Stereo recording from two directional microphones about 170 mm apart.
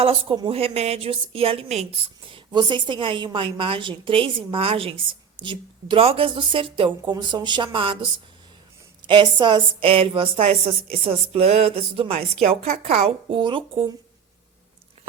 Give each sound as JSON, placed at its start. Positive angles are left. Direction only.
{"t": 0.0, "sound": "a woman's voice", "side_deg": -35}
{"t": 9.0, "sound": "a woman's voice", "side_deg": -30}
{"t": 13.3, "sound": "speech", "side_deg": -30}